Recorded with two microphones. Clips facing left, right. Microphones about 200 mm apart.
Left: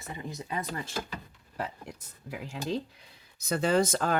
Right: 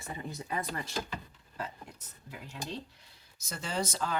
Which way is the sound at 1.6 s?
80° left.